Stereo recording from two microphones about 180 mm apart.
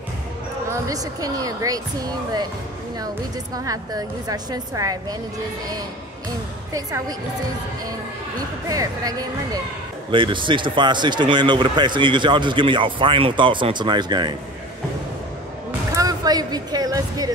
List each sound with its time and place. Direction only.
0.7 s speech: 20° right (ahead or behind)
3.5 s speech: 20° right (ahead or behind)
6.7 s speech: 20° right (ahead or behind)
8.6 s speech: 20° right (ahead or behind)
15.9 s music: 20° right (ahead or behind)